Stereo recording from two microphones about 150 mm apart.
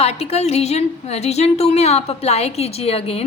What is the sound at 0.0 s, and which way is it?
A woman's voice, 45° left (ahead or behind).